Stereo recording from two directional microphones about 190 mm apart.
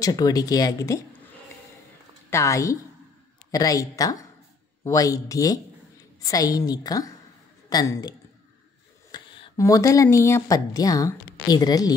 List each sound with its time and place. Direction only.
0.0 s speech: 20° left (ahead or behind)
2.3 s a woman's voice: 15° left (ahead or behind)
9.1 s speech: 20° left (ahead or behind)